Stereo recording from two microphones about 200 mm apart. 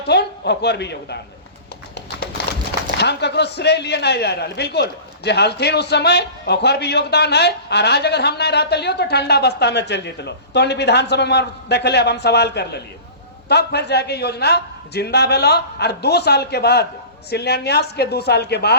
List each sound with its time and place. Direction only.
0.1 s speech: 55° left (ahead or behind)
3.0 s speech: 55° left (ahead or behind)